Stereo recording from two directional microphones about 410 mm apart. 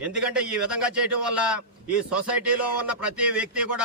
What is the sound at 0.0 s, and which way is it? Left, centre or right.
A man's voice, centre.